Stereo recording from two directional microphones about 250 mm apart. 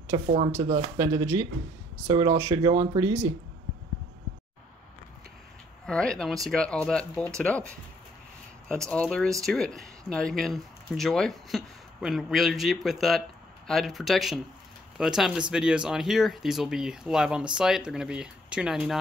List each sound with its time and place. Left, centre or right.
0.1 s speech: right
0.9 s speech: centre
5.9 s speech: centre
8.6 s speech: centre